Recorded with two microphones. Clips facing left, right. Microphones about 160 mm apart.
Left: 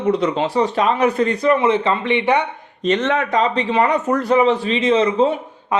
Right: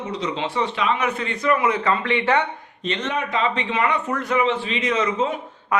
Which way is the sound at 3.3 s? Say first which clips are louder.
Left 5 dB; 35° left (ahead or behind).